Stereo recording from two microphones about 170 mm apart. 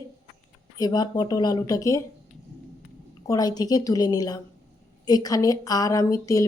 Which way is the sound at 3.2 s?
20° left (ahead or behind).